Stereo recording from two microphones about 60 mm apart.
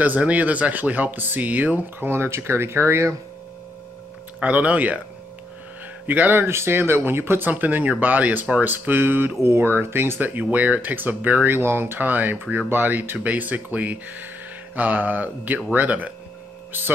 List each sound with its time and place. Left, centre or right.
0.2 s speech: right
4.4 s speech: right
6.0 s speech: right